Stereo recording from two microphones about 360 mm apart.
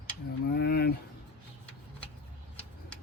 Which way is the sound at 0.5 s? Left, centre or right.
Left.